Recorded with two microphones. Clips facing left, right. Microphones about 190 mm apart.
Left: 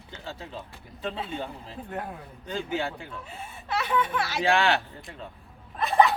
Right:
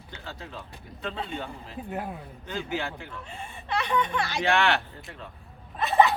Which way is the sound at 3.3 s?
5° left (ahead or behind).